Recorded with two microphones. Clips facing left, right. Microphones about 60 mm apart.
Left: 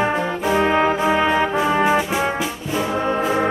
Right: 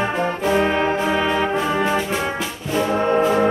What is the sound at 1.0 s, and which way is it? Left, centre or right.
Brass instrument, centre.